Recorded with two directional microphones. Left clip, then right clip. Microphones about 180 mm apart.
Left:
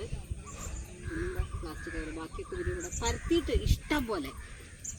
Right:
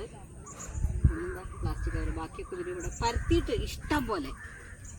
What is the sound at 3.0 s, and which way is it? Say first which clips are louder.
Speech: right 2 dB; centre (ahead or behind).